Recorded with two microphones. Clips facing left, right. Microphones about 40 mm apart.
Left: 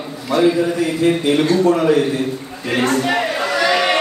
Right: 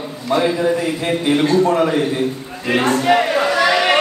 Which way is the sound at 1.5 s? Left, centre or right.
Right.